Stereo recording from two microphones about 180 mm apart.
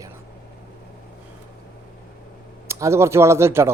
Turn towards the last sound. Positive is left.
turn(degrees=-15)  # may be behind; listen again after turning